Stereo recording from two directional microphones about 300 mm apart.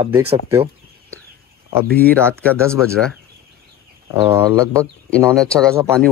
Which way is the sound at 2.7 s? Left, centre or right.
Centre.